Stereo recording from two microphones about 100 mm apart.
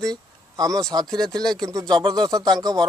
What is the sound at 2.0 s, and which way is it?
Speech, 50° right (ahead or behind).